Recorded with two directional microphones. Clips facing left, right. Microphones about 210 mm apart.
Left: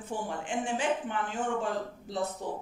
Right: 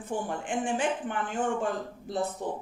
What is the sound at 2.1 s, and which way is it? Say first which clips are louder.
Speech: right 2 dB; 50° right (ahead or behind).